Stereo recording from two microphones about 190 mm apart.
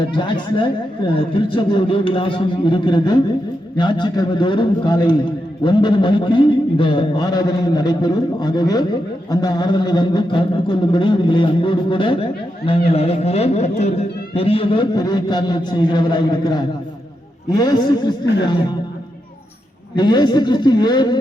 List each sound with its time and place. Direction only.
0.1 s a man's voice: 25° left (ahead or behind)
20.0 s a man's voice: 25° left (ahead or behind)